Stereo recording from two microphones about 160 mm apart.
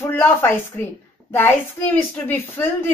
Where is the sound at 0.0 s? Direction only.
15° left (ahead or behind).